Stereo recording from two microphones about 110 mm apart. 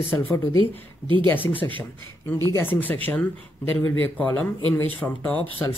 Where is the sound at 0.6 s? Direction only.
50° right (ahead or behind).